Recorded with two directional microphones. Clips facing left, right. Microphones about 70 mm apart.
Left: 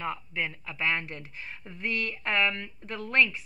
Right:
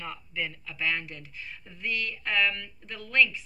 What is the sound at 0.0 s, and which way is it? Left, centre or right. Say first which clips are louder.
A woman's voice: left 3 dB; left.